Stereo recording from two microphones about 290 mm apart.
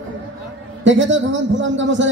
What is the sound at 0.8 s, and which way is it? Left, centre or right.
A man's voice, right.